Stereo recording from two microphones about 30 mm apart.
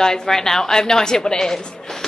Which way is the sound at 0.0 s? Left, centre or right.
Centre.